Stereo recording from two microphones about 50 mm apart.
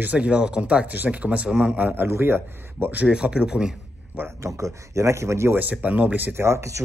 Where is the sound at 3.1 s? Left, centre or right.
Centre.